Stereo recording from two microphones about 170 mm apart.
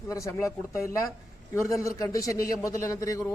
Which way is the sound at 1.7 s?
20° left (ahead or behind).